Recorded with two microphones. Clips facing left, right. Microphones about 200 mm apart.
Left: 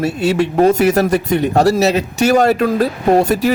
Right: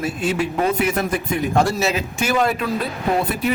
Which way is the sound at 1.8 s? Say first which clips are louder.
Left 8 dB; 75° left (ahead or behind).